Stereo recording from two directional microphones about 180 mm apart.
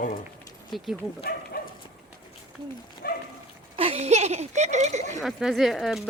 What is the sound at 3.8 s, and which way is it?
Speech, 35° right (ahead or behind).